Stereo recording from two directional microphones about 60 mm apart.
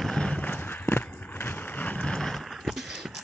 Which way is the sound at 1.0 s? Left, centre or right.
Left.